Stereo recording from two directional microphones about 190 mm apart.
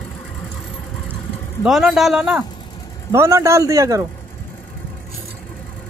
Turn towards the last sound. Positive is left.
turn(degrees=-15)  # may be behind; listen again after turning